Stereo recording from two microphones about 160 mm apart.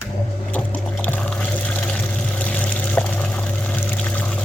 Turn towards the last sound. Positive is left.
turn(degrees=10)  # may be behind; listen again after turning